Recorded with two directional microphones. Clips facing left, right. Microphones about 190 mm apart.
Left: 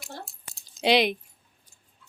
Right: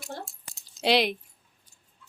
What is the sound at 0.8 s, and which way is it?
Speech, centre (ahead or behind).